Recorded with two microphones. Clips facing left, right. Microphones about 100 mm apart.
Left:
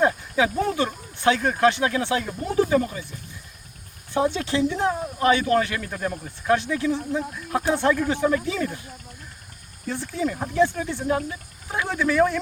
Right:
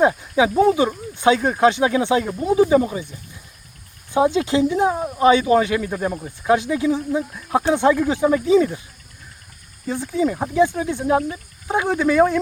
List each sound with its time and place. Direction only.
0.0 s speech: 15° right (ahead or behind)
4.1 s speech: 15° right (ahead or behind)
9.9 s speech: 15° right (ahead or behind)